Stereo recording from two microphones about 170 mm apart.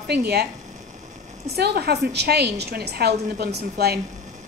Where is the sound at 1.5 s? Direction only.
70° right (ahead or behind).